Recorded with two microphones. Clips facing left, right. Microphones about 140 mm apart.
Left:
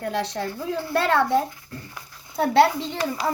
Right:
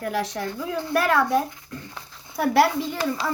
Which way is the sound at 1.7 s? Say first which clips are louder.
Right 1 dB; 20° right (ahead or behind).